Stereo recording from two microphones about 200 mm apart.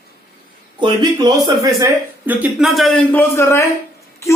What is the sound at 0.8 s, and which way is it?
Speech, 20° right (ahead or behind).